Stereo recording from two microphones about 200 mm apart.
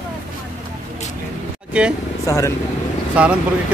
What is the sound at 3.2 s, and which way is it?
Speech, 5° right (ahead or behind).